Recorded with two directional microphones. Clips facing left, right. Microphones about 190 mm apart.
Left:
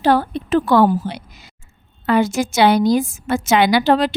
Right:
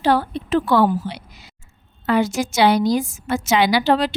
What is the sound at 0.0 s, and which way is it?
A woman's voice, 45° left (ahead or behind).